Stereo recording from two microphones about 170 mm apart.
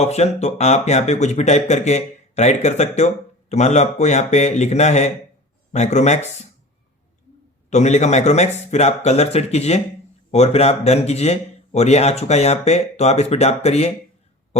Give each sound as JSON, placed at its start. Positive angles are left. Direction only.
{"t": 0.0, "sound": "a man's voice", "side_deg": 40}
{"t": 7.7, "sound": "speech", "side_deg": 45}